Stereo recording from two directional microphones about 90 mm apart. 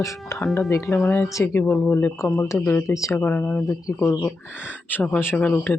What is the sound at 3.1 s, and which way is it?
Speech, 20° left (ahead or behind).